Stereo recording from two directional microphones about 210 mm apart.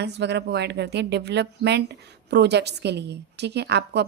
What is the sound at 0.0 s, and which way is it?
Speech, 55° right (ahead or behind).